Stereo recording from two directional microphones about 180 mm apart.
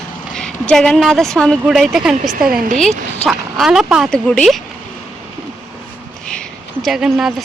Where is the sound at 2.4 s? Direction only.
55° right (ahead or behind).